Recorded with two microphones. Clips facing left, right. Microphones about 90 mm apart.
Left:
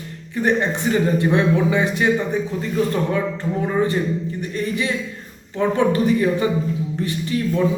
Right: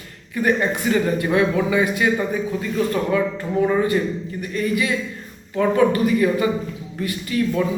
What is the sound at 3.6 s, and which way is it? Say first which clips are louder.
A man's voice: right 3 dB; 35° left (ahead or behind).